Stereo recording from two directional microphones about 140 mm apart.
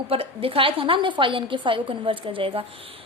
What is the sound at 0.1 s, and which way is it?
A woman's voice, 40° right (ahead or behind).